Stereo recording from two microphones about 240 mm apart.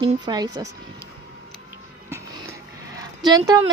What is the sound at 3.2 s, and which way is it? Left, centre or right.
Speech, centre.